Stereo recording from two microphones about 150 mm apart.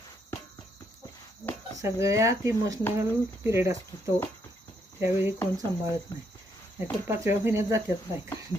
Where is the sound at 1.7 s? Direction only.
20° right (ahead or behind).